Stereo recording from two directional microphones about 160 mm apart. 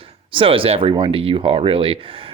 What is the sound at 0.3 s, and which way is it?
Speech, 35° right (ahead or behind).